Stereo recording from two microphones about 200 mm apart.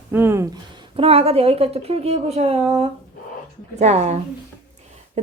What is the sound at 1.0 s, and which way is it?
A woman's voice, 30° right (ahead or behind).